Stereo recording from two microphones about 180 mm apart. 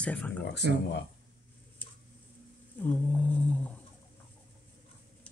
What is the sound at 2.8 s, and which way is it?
Humming, 10° left (ahead or behind).